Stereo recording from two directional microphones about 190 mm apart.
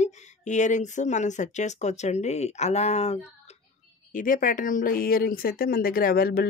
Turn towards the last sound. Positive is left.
turn(degrees=55)  # may be behind; listen again after turning